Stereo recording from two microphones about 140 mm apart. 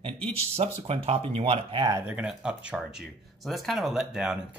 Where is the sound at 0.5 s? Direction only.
45° right (ahead or behind).